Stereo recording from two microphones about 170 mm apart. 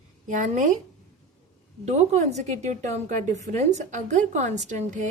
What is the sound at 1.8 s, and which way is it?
A woman's voice, 40° right (ahead or behind).